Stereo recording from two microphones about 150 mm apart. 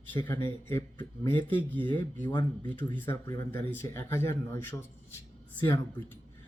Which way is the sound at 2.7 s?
10° left (ahead or behind).